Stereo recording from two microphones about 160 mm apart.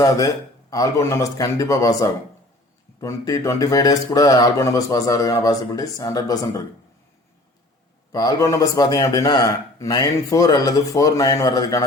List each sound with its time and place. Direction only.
0.7 s a man's voice: 20° left (ahead or behind)
8.1 s a man's voice: 25° left (ahead or behind)